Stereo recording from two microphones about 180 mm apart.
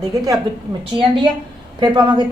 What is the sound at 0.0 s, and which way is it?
Speech, 20° right (ahead or behind).